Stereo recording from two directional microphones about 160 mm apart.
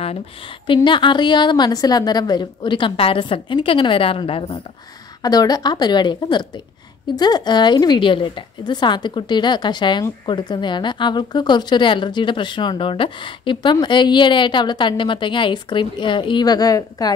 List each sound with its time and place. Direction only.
0.8 s a woman's voice: 30° left (ahead or behind)
5.2 s a woman's voice: 25° left (ahead or behind)